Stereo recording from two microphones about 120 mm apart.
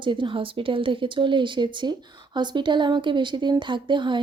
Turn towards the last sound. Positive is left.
turn(degrees=-40)  # may be behind; listen again after turning